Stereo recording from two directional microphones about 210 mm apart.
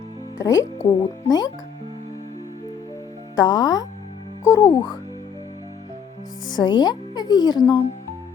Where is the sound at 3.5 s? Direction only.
20° left (ahead or behind).